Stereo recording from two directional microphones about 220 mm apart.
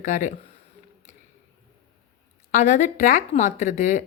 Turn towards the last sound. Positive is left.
turn(degrees=35)  # may be behind; listen again after turning